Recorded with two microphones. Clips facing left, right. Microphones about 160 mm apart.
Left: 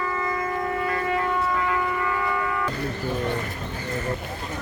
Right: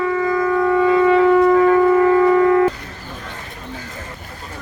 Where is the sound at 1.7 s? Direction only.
45° right (ahead or behind).